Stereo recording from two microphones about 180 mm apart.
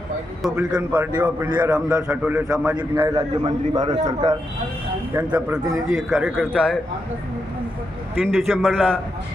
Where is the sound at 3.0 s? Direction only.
20° right (ahead or behind).